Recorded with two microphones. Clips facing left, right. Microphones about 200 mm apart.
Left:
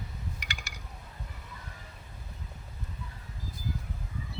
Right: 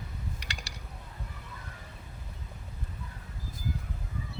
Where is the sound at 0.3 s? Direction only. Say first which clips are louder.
Even; 30° right (ahead or behind).